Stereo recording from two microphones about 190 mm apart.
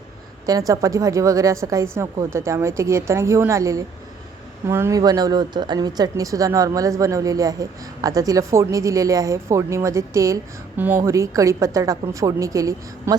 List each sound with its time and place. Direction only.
0.4 s a woman's voice: 20° right (ahead or behind)